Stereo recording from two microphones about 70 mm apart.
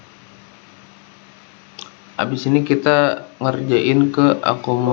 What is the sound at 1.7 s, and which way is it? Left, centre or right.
Speech, centre.